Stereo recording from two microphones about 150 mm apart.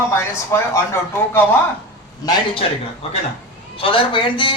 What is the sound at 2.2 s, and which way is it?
Speech, 25° left (ahead or behind).